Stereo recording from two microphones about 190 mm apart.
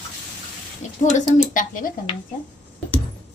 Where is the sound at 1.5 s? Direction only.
45° left (ahead or behind).